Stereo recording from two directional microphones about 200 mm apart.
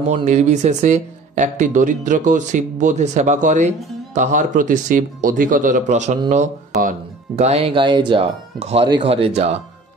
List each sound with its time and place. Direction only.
0.1 s speech: 35° right (ahead or behind)